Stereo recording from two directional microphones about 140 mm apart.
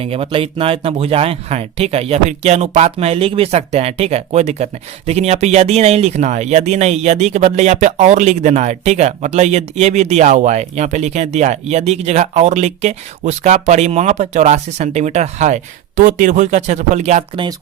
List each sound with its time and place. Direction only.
0.0 s speech: 45° right (ahead or behind)